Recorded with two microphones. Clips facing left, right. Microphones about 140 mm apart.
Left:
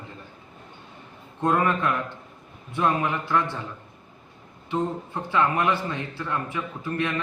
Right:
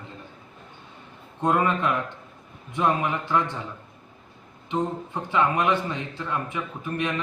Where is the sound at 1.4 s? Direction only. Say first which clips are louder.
Even; 20° right (ahead or behind).